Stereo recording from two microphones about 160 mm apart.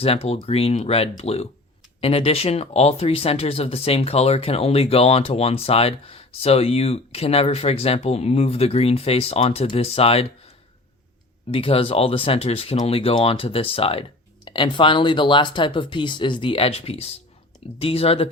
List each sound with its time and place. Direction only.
0.0 s speech: 40° left (ahead or behind)
11.5 s speech: 35° left (ahead or behind)